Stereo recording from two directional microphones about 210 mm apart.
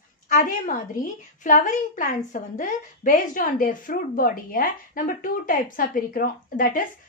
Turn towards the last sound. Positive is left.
turn(degrees=40)  # may be behind; listen again after turning